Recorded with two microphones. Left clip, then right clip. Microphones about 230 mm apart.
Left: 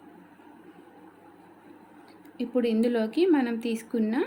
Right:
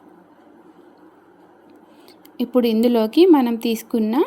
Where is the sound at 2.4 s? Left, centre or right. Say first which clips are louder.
Right 8 dB; right.